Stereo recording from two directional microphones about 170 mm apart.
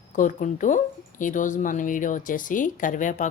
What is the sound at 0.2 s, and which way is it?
A woman's voice, 50° left (ahead or behind).